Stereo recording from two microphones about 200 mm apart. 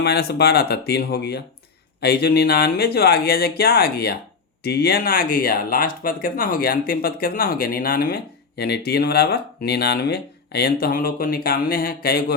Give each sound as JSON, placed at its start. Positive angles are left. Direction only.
{"t": 0.0, "sound": "speech", "side_deg": 55}